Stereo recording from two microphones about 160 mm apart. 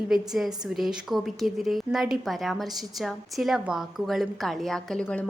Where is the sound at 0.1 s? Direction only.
Centre (ahead or behind).